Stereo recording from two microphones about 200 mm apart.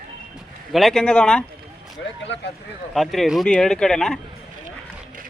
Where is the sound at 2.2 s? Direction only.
60° left (ahead or behind).